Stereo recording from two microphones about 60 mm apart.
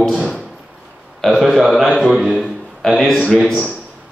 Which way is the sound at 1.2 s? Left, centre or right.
Centre.